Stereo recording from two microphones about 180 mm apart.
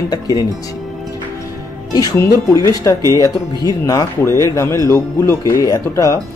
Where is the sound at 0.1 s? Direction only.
20° left (ahead or behind).